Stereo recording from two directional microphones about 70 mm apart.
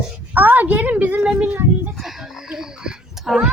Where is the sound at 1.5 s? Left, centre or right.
Right.